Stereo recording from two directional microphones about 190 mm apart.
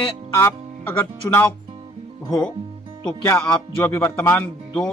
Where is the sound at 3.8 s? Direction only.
15° left (ahead or behind).